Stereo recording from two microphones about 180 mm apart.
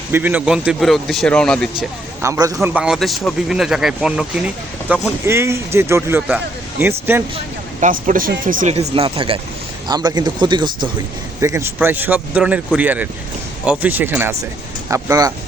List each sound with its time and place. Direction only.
0.1 s a man's voice: 10° right (ahead or behind)
2.2 s speech: 15° right (ahead or behind)
7.3 s speech: 45° right (ahead or behind)
8.7 s speech: 35° right (ahead or behind); by 15.3 s 15° right (ahead or behind)